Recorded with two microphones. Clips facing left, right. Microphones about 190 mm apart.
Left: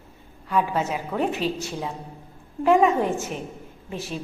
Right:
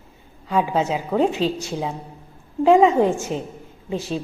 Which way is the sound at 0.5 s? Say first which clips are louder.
Right 3 dB; 25° right (ahead or behind).